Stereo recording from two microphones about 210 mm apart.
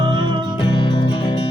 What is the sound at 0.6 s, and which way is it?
Music, 20° left (ahead or behind).